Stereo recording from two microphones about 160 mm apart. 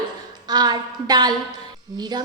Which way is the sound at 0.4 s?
25° right (ahead or behind).